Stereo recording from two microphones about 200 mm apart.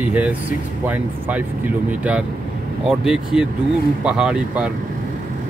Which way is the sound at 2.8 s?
5° right (ahead or behind).